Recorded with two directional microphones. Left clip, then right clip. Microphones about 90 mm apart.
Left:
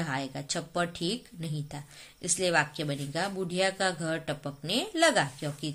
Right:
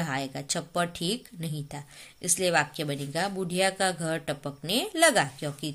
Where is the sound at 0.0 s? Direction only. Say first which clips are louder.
Right 2 dB; 25° right (ahead or behind).